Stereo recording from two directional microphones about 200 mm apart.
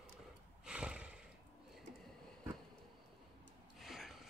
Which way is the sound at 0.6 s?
5° right (ahead or behind).